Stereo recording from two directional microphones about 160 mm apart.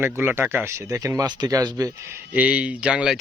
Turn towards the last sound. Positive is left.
turn(degrees=-5)  # may be behind; listen again after turning